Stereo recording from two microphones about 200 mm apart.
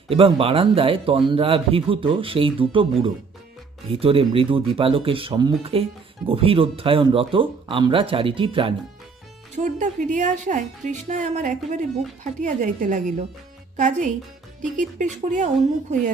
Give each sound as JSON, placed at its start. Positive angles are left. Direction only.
{"t": 0.1, "sound": "a man's voice", "side_deg": -30}
{"t": 9.6, "sound": "speech", "side_deg": -40}